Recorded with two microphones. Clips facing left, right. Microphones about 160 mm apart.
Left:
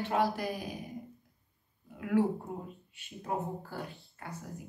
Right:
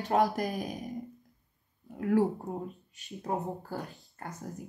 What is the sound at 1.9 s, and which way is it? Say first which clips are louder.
Speech: right 2 dB; 40° right (ahead or behind).